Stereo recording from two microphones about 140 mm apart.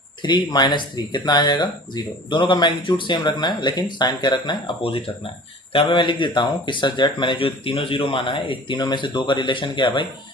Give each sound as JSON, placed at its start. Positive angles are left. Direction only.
{"t": 0.2, "sound": "speech", "side_deg": 30}